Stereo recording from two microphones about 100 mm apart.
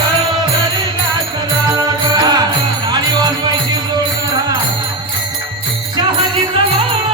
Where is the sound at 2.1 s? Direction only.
40° right (ahead or behind).